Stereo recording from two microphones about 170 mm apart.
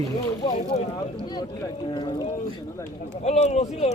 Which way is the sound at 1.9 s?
25° left (ahead or behind).